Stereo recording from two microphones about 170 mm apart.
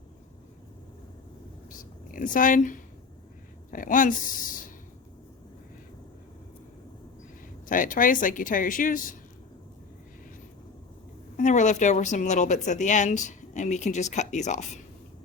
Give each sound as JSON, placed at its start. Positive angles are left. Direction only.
{"t": 1.8, "sound": "speech", "side_deg": 50}
{"t": 3.7, "sound": "a sound", "side_deg": 50}
{"t": 7.7, "sound": "speech", "side_deg": 50}
{"t": 11.3, "sound": "speech", "side_deg": 45}